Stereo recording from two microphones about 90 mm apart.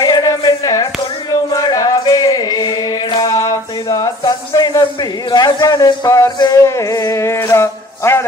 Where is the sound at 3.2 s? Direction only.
40° left (ahead or behind).